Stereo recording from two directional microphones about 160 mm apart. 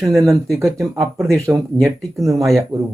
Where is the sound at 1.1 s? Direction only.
5° left (ahead or behind).